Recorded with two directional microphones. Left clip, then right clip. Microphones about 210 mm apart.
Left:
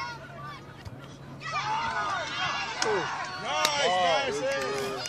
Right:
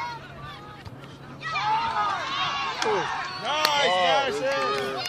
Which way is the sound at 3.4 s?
5° right (ahead or behind).